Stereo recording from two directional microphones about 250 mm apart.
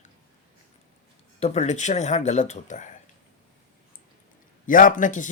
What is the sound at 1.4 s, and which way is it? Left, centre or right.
Speech, left.